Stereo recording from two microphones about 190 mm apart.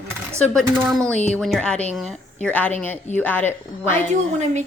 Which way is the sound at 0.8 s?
Centre (ahead or behind).